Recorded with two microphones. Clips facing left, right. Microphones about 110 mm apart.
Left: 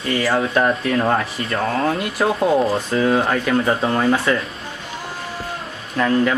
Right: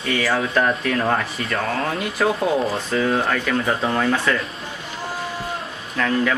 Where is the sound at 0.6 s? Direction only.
10° left (ahead or behind).